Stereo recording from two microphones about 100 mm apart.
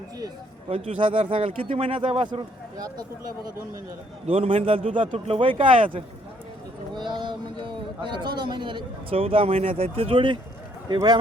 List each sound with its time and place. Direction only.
0.7 s speech: 70° right (ahead or behind)
2.7 s speech: 40° right (ahead or behind)
4.3 s a man's voice: 70° right (ahead or behind)
6.9 s a man's voice: 50° right (ahead or behind)
10.8 s speech: 45° right (ahead or behind)